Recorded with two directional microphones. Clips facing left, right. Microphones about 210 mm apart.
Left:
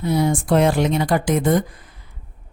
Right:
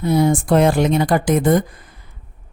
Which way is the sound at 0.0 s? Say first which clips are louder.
Right 3 dB; 50° right (ahead or behind).